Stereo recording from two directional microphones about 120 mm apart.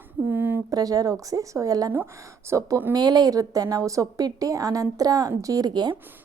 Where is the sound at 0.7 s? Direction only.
30° right (ahead or behind).